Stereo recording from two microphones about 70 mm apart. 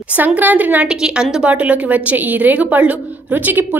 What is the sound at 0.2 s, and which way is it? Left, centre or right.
Speech, right.